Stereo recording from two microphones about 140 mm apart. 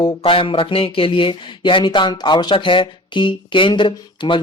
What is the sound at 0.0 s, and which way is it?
Speech, 40° left (ahead or behind).